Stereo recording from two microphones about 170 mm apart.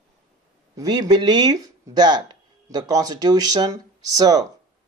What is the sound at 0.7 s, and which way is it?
Speech, 25° right (ahead or behind).